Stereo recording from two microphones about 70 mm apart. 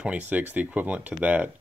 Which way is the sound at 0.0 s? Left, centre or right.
Centre.